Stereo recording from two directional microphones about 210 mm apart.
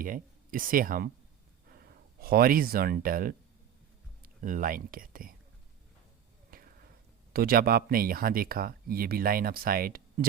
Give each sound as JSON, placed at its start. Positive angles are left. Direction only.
{"t": 0.0, "sound": "speech", "side_deg": -40}
{"t": 6.5, "sound": "a sound", "side_deg": -45}
{"t": 7.3, "sound": "speech", "side_deg": -45}